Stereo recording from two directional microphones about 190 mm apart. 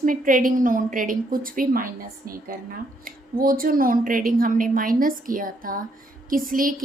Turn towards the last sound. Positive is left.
turn(degrees=-45)  # may be behind; listen again after turning